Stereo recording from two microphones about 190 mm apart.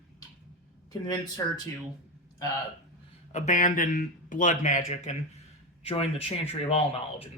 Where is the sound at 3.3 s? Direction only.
40° left (ahead or behind).